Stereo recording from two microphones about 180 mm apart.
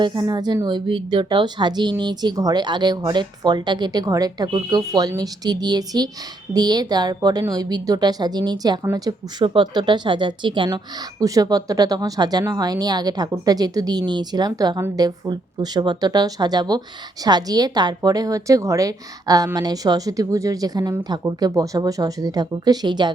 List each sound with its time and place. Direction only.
0.0 s speech: 20° right (ahead or behind)